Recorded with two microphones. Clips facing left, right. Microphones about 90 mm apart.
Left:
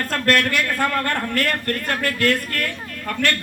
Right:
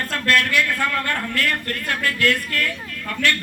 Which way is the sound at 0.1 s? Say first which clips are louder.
Left 1 dB; 45° left (ahead or behind).